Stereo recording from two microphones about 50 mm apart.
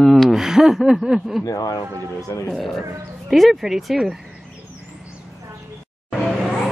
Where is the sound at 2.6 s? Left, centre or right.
Centre.